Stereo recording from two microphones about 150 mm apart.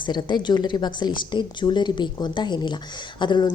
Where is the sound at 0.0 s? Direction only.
30° left (ahead or behind).